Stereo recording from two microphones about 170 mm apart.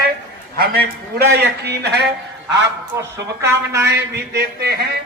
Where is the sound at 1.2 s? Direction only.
75° right (ahead or behind).